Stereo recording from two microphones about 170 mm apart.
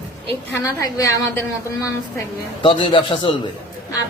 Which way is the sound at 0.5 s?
20° left (ahead or behind).